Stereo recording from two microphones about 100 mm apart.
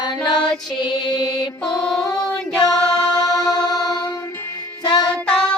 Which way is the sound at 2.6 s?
40° left (ahead or behind).